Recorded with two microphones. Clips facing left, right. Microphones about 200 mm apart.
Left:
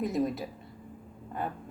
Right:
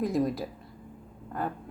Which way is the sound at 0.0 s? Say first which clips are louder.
Right 2 dB; centre (ahead or behind).